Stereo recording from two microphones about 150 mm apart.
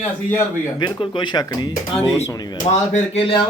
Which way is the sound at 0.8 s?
30° left (ahead or behind).